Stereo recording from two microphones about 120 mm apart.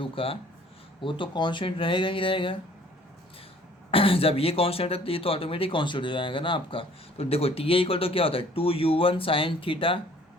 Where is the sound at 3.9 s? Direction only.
50° left (ahead or behind).